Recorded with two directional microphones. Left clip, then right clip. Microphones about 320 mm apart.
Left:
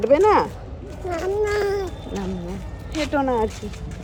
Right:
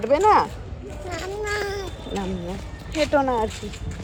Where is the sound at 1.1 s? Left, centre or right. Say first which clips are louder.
Left 6 dB; centre.